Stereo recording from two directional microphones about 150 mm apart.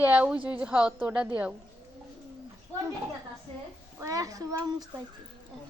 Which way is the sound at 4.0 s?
20° right (ahead or behind).